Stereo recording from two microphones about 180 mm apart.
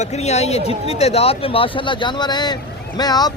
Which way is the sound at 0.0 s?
35° left (ahead or behind).